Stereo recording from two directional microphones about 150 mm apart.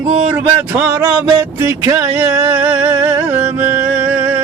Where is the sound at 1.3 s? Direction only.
20° right (ahead or behind).